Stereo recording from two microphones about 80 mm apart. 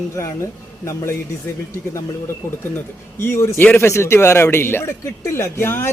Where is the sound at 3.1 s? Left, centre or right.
Left.